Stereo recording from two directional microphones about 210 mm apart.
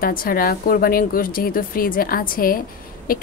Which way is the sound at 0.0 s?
45° left (ahead or behind).